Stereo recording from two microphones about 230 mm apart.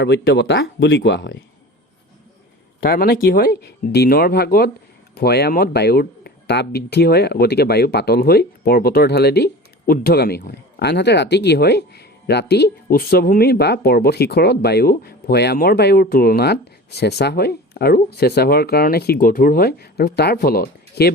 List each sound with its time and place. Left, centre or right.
0.0 s speech: left
2.8 s speech: left